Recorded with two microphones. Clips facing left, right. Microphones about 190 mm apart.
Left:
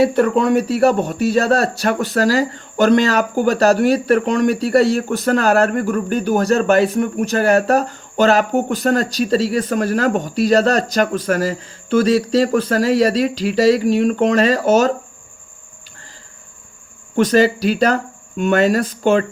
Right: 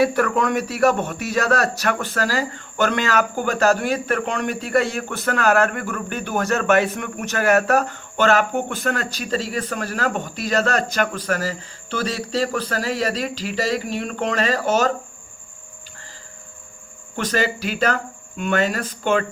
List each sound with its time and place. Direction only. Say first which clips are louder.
0.0 s speech: left 5 dB; 25° left (ahead or behind); by 14.9 s 45° left (ahead or behind)
17.2 s speech: left 9 dB; 40° left (ahead or behind)